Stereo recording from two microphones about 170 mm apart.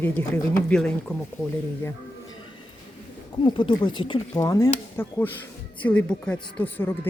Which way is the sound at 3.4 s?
30° left (ahead or behind).